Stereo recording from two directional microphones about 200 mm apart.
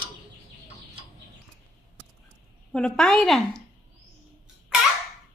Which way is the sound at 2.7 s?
5° left (ahead or behind).